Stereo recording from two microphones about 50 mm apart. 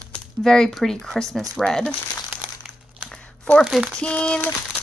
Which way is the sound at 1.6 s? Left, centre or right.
Centre.